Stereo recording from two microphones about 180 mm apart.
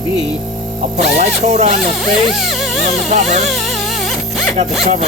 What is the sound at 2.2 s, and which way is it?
Music, centre (ahead or behind).